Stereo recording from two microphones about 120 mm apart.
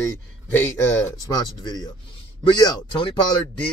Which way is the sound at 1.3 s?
35° left (ahead or behind).